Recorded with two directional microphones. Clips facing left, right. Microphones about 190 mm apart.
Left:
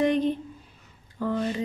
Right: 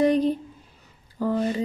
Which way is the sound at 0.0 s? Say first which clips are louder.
Right 3 dB; 35° right (ahead or behind).